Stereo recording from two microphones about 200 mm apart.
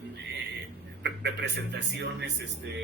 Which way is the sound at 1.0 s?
60° right (ahead or behind).